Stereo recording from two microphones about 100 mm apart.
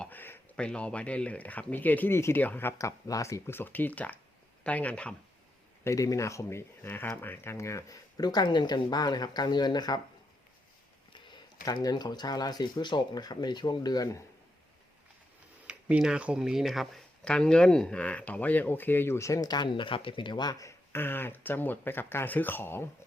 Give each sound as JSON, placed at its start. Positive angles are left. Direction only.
{"t": 0.0, "sound": "a sound", "side_deg": 20}
{"t": 0.5, "sound": "speech", "side_deg": 10}
{"t": 5.8, "sound": "speech", "side_deg": 35}
{"t": 11.1, "sound": "speech", "side_deg": 45}
{"t": 15.6, "sound": "speech", "side_deg": -10}